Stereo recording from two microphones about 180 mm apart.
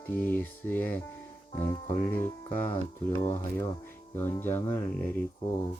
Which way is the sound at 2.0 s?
10° left (ahead or behind).